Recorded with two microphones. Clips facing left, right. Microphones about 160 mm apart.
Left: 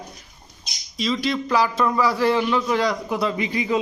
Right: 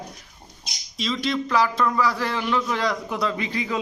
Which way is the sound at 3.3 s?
15° left (ahead or behind).